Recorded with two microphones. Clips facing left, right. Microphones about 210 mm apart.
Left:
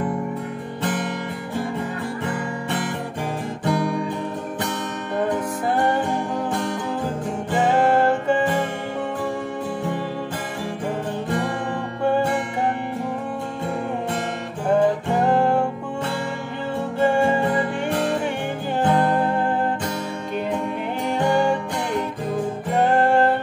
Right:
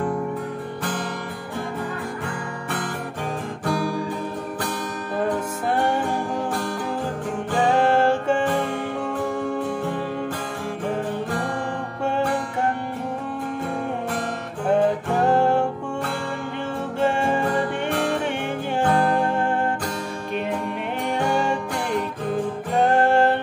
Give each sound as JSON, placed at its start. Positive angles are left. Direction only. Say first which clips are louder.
{"t": 2.2, "sound": "music", "louder": "left 4 dB", "side_deg": 20}
{"t": 18.8, "sound": "music", "louder": "left 1 dB", "side_deg": 5}
{"t": 22.8, "sound": "music", "louder": "even", "side_deg": 0}